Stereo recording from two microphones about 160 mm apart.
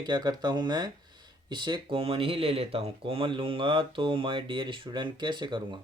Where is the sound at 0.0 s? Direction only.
25° right (ahead or behind).